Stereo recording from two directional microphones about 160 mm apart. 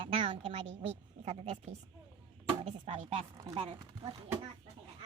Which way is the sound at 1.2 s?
40° right (ahead or behind).